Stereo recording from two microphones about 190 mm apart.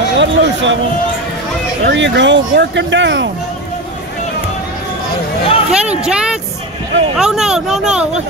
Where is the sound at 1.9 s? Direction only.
70° right (ahead or behind).